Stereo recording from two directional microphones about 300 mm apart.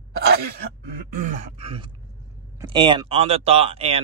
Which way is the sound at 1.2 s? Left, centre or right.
Right.